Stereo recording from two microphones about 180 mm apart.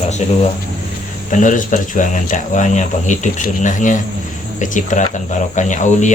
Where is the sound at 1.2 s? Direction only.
45° left (ahead or behind).